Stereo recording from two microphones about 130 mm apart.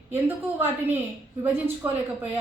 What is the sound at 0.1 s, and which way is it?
A woman's voice, 15° right (ahead or behind).